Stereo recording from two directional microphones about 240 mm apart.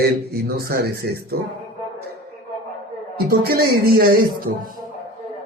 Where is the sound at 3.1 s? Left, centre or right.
Right.